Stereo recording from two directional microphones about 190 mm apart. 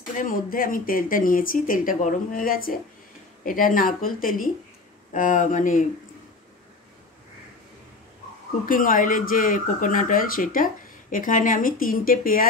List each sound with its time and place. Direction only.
0.2 s speech: 45° left (ahead or behind)
8.6 s speech: 45° left (ahead or behind)